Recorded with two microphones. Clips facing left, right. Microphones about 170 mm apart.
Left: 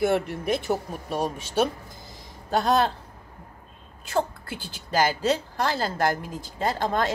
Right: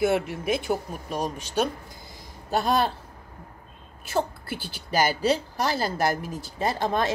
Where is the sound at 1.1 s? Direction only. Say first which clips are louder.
Left 2 dB; 40° right (ahead or behind).